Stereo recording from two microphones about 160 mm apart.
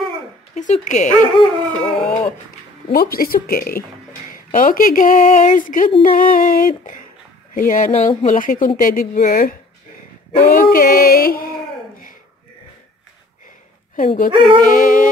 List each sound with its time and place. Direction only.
0.6 s speech: 50° left (ahead or behind)
1.1 s dog: 10° left (ahead or behind)
2.9 s a woman's voice: 65° left (ahead or behind)
4.3 s speech: 55° left (ahead or behind)
13.9 s speech: 55° left (ahead or behind)